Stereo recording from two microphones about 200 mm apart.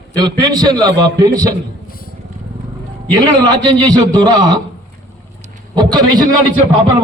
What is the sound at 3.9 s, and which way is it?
Speech, 20° right (ahead or behind).